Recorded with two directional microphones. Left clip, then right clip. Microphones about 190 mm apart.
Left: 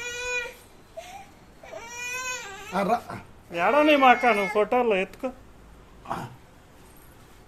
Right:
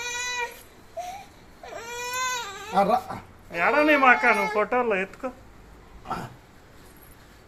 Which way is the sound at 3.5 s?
20° left (ahead or behind).